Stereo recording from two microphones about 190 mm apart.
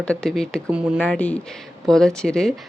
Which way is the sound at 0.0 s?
5° left (ahead or behind).